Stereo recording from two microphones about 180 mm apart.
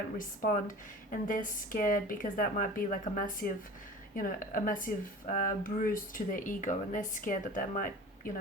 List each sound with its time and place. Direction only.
1.1 s speech: 50° left (ahead or behind)